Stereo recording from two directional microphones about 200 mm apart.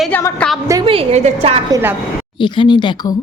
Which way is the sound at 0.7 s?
25° right (ahead or behind).